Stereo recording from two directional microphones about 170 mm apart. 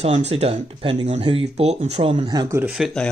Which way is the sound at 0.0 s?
40° right (ahead or behind).